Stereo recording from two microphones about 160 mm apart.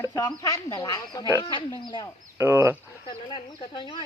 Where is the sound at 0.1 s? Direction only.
25° left (ahead or behind).